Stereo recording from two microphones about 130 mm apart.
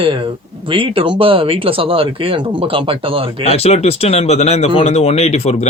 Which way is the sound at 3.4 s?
50° left (ahead or behind).